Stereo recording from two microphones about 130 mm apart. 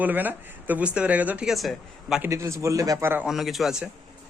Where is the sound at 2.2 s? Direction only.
20° right (ahead or behind).